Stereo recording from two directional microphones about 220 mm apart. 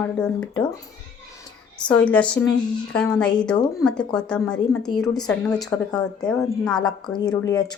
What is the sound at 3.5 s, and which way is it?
Speech, 15° left (ahead or behind).